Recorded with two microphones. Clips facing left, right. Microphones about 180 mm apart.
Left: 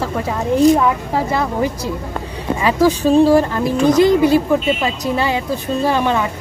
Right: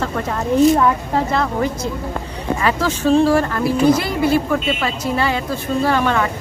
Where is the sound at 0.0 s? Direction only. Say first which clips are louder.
Left 1 dB; 10° left (ahead or behind).